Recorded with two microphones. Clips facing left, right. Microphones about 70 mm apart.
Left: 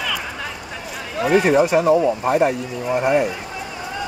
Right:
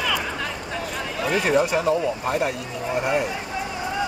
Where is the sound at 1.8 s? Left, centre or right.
Left.